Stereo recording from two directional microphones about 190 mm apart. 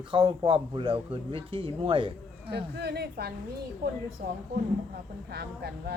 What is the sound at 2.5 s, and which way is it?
A woman's voice, 60° right (ahead or behind).